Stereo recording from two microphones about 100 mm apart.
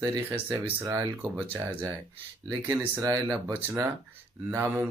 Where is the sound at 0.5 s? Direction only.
15° right (ahead or behind).